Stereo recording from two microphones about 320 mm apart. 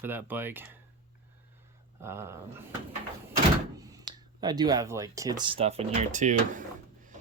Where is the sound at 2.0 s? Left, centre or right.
Centre.